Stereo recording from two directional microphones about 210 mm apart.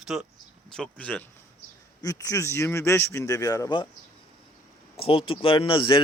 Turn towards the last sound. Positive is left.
turn(degrees=25)  # may be behind; listen again after turning